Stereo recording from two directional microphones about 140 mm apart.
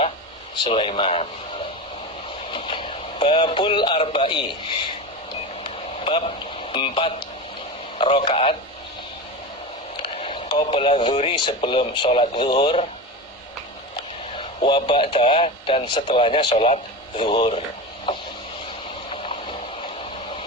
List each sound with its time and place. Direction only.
0.6 s speech: 40° left (ahead or behind)
2.5 s speech: 35° left (ahead or behind)
5.6 s radio: 40° left (ahead or behind)
6.7 s speech: 35° left (ahead or behind)
10.0 s speech: 40° left (ahead or behind)
14.3 s speech: 35° left (ahead or behind)
19.1 s a sound: 40° left (ahead or behind)